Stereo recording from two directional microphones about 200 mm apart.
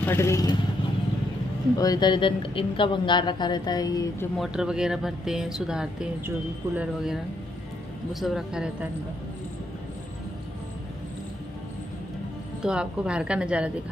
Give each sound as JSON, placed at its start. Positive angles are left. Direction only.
{"t": 0.0, "sound": "speech", "side_deg": 15}
{"t": 1.8, "sound": "a woman's voice", "side_deg": 20}
{"t": 4.4, "sound": "speech", "side_deg": -5}
{"t": 12.6, "sound": "speech", "side_deg": -5}